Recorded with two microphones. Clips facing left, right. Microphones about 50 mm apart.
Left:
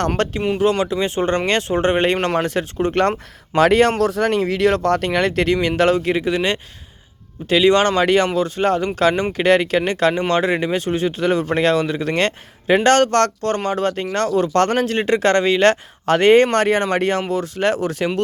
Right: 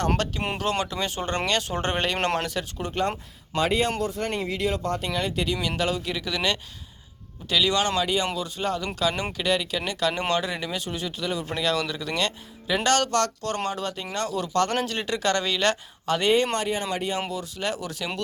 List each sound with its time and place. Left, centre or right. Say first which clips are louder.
0.2 s speech: left 8 dB; left
0.6 s speech: left 9 dB; left
2.4 s speech: left 9 dB; left
2.9 s speech: left 6 dB; left
5.0 s speech: left 9 dB; left
5.5 s speech: left 10 dB; left
8.4 s speech: left 10 dB; left
17.3 s speech: left 10 dB; left